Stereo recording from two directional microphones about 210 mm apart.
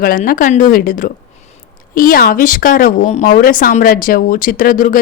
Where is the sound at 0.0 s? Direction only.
45° left (ahead or behind).